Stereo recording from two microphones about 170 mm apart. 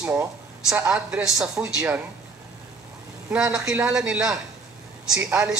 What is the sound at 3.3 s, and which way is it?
Speech, 5° right (ahead or behind).